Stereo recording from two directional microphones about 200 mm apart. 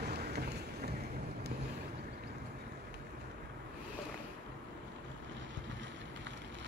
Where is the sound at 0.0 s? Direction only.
55° right (ahead or behind).